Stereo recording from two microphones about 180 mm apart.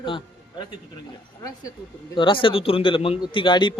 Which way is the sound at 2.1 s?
30° left (ahead or behind).